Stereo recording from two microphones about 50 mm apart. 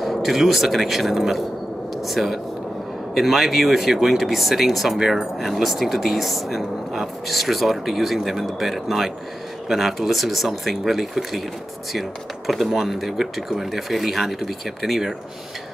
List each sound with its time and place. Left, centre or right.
0.0 s speech: centre